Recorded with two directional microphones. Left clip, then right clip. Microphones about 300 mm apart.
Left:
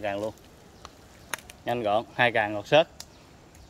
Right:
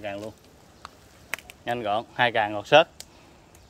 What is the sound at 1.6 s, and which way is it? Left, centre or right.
Speech, centre.